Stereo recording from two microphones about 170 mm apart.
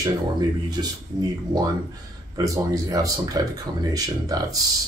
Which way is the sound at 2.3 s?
20° right (ahead or behind).